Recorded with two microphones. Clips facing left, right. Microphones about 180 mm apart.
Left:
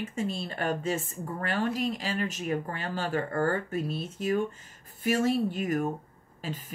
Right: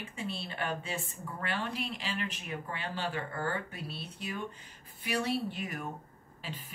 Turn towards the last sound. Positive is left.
turn(degrees=45)  # may be behind; listen again after turning